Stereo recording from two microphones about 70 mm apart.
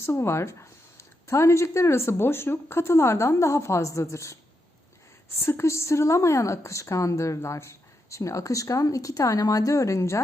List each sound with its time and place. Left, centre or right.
0.0 s speech: left
5.4 s speech: left